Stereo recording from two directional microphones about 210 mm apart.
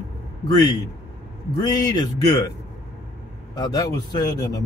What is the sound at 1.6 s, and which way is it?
Speech, 20° left (ahead or behind).